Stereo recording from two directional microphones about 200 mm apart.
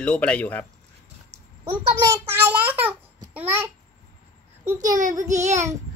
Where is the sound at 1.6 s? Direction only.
15° right (ahead or behind).